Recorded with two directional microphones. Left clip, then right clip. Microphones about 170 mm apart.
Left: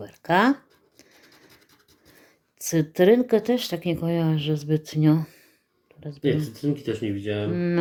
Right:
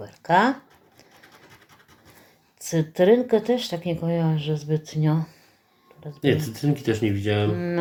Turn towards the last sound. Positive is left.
turn(degrees=45)  # may be behind; listen again after turning